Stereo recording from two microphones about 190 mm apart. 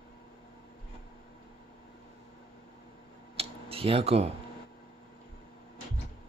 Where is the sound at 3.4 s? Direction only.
30° right (ahead or behind).